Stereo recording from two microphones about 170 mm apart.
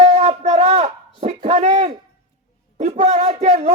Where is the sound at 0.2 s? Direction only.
40° right (ahead or behind).